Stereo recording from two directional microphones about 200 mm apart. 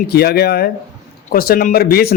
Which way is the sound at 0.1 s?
50° left (ahead or behind).